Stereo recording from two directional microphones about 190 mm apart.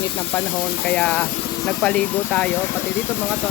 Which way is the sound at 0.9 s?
5° left (ahead or behind).